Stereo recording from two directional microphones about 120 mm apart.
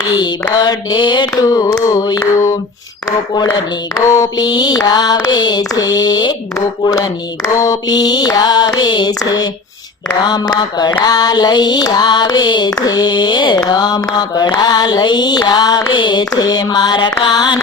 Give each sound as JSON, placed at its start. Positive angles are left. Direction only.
{"t": 0.1, "sound": "mantra", "side_deg": 35}
{"t": 1.3, "sound": "female singing", "side_deg": 30}
{"t": 4.0, "sound": "mantra", "side_deg": 25}